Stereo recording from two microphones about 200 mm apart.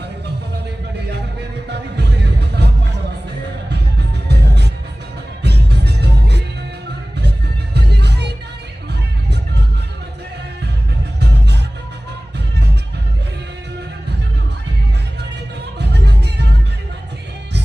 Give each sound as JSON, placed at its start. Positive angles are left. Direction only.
{"t": 0.3, "sound": "music", "side_deg": -55}
{"t": 4.3, "sound": "music", "side_deg": -55}
{"t": 11.2, "sound": "music", "side_deg": -55}
{"t": 15.8, "sound": "music", "side_deg": -55}